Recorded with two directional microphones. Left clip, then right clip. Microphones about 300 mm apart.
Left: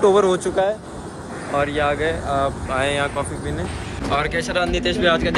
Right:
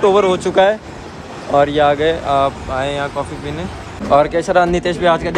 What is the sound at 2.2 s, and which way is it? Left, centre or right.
Speech, centre.